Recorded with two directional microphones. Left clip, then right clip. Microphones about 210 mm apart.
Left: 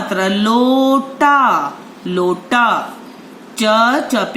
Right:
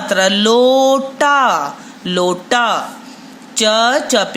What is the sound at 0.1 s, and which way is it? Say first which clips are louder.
Speech: right 4 dB; 50° right (ahead or behind).